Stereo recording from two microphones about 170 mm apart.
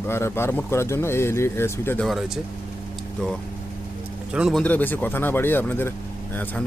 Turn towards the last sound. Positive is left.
turn(degrees=10)  # may be behind; listen again after turning